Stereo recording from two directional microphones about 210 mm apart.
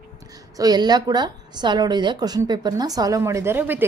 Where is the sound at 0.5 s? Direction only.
20° right (ahead or behind).